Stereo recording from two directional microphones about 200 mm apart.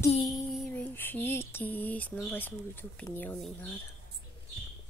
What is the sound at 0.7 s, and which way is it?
Speech, 10° left (ahead or behind).